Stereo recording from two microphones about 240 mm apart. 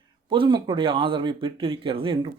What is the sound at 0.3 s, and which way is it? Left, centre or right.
Speech, centre.